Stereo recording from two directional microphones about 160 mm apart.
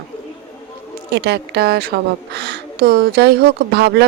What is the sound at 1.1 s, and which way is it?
A woman's voice, 90° right.